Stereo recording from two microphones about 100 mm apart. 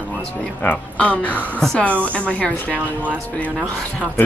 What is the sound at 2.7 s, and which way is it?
Speech, 15° right (ahead or behind).